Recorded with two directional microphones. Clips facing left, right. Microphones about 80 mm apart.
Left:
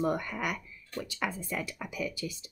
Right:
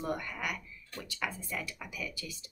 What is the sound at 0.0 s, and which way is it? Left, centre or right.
Speech, left.